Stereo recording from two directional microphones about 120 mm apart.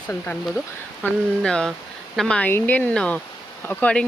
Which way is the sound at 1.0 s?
5° left (ahead or behind).